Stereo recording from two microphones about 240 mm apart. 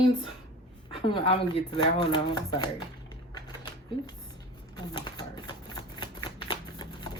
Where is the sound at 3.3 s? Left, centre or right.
Centre.